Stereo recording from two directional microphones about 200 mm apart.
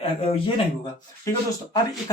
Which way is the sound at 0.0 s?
30° left (ahead or behind).